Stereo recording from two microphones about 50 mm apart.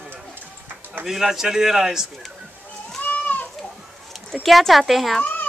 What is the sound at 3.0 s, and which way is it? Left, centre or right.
Goat, left.